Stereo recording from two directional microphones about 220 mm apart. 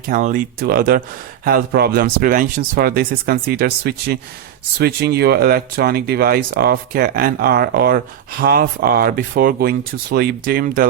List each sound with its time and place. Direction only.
0.1 s speech: 35° right (ahead or behind)